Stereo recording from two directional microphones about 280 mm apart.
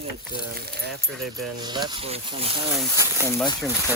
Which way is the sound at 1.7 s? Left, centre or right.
Centre.